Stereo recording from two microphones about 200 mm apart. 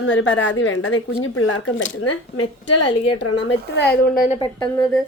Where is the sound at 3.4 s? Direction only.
55° left (ahead or behind).